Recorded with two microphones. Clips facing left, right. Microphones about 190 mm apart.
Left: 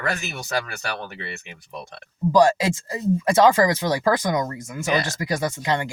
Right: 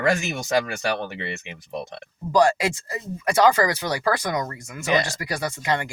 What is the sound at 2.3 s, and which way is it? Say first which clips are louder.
Speech: left 1 dB; 20° left (ahead or behind).